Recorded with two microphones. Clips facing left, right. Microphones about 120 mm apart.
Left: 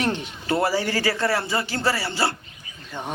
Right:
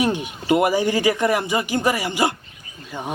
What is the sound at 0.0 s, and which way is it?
Speech, 10° right (ahead or behind).